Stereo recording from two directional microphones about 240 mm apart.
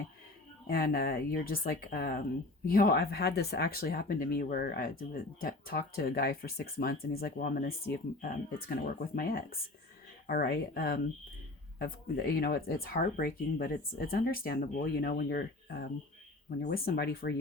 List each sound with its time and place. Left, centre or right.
0.7 s speech: left